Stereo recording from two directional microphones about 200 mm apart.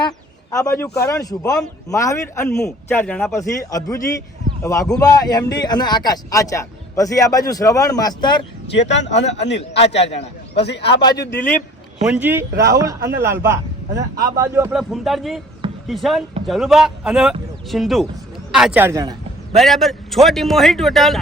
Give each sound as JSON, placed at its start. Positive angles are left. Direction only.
{"t": 0.5, "sound": "a man's voice", "side_deg": 15}
{"t": 2.5, "sound": "a man's voice", "side_deg": 5}
{"t": 3.4, "sound": "a man's voice", "side_deg": 15}
{"t": 8.7, "sound": "a man's voice", "side_deg": 65}
{"t": 9.1, "sound": "a man's voice", "side_deg": 35}
{"t": 10.5, "sound": "a man's voice", "side_deg": 55}
{"t": 11.0, "sound": "a man's voice", "side_deg": 20}
{"t": 12.0, "sound": "a man's voice", "side_deg": -5}
{"t": 14.7, "sound": "a man's voice", "side_deg": 0}
{"t": 19.5, "sound": "a man's voice", "side_deg": 0}